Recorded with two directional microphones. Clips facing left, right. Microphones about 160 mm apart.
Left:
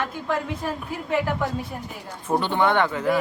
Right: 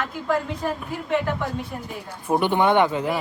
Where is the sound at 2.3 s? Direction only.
15° right (ahead or behind).